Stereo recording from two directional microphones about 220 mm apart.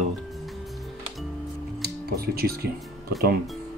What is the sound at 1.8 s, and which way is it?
Music, 45° right (ahead or behind).